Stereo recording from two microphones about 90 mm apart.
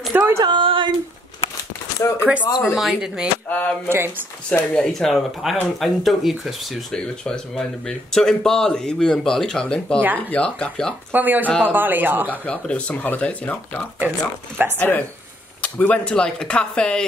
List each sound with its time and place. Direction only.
0.1 s a sound: 35° right (ahead or behind)
0.4 s a sound: 65° right (ahead or behind)
2.0 s speech: 30° left (ahead or behind)
2.6 s speech: centre (ahead or behind)
3.4 s speech: 15° left (ahead or behind)
11.1 s speech: 20° right (ahead or behind)
12.3 s speech: 15° left (ahead or behind)